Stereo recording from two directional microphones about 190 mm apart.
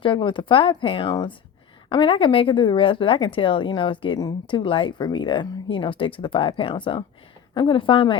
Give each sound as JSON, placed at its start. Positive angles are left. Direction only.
{"t": 0.0, "sound": "speech", "side_deg": 25}